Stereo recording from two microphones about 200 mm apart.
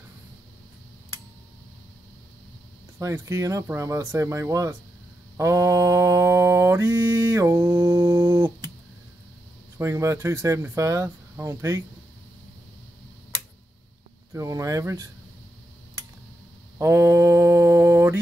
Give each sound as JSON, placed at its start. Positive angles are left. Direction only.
{"t": 3.0, "sound": "speech", "side_deg": -15}
{"t": 5.4, "sound": "mantra", "side_deg": -15}
{"t": 9.8, "sound": "speech", "side_deg": -15}
{"t": 14.3, "sound": "speech", "side_deg": -15}
{"t": 16.7, "sound": "mantra", "side_deg": -15}